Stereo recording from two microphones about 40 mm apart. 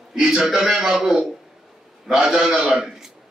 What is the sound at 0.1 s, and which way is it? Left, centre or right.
A man's voice, centre.